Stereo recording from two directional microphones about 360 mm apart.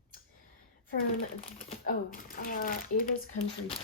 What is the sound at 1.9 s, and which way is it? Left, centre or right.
Speech, left.